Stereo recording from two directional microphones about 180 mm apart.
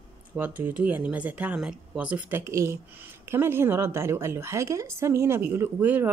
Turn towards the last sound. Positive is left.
turn(degrees=-10)  # may be behind; listen again after turning